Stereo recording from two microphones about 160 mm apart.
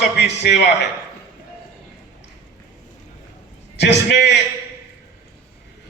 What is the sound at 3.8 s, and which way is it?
Speech, 90° left.